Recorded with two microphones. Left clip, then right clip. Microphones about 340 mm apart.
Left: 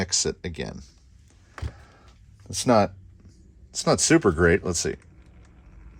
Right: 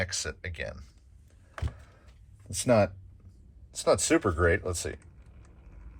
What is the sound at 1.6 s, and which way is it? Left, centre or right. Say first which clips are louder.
Power windows: left 1 dB; centre.